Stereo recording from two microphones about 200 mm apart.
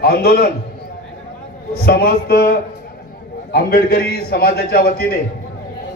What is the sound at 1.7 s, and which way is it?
A man's voice, 50° left (ahead or behind).